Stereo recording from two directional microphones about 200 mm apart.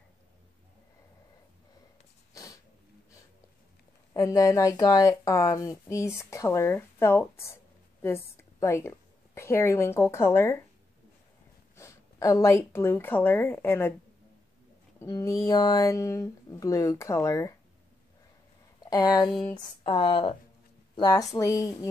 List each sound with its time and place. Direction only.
2.3 s a sound: 15° left (ahead or behind)
4.1 s a woman's voice: 15° left (ahead or behind)
11.7 s speech: 15° left (ahead or behind)
15.0 s speech: 15° left (ahead or behind)
18.8 s speech: 20° left (ahead or behind)